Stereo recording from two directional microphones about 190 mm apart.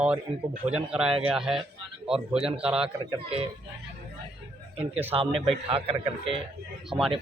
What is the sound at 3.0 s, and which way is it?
Speech, 30° right (ahead or behind).